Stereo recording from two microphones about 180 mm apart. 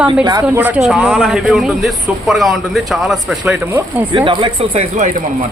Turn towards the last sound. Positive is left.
turn(degrees=-30)  # may be behind; listen again after turning